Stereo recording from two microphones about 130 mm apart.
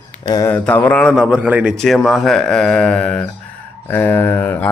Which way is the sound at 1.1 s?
5° right (ahead or behind).